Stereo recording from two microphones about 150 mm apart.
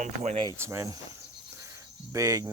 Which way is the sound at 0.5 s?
20° right (ahead or behind).